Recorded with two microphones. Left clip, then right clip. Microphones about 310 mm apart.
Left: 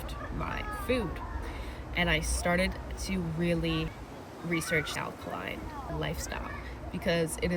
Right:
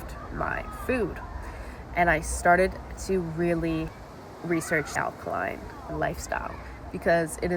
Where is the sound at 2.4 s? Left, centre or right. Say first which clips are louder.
Right 8 dB; right.